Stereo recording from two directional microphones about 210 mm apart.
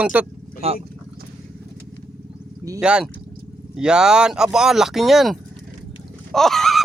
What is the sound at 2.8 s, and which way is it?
Speech, 5° right (ahead or behind).